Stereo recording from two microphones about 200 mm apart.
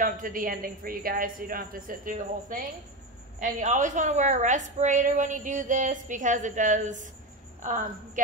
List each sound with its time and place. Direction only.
0.0 s a woman's voice: 40° right (ahead or behind)